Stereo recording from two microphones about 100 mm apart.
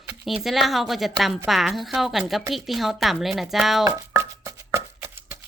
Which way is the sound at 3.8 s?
30° right (ahead or behind).